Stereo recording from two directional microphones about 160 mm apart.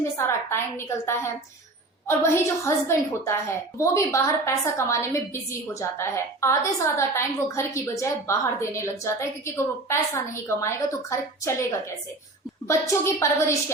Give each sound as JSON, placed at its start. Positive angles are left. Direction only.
{"t": 0.2, "sound": "a woman's voice", "side_deg": 15}
{"t": 12.6, "sound": "a woman's voice", "side_deg": 20}